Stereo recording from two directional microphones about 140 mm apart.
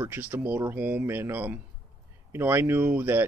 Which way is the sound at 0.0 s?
15° right (ahead or behind).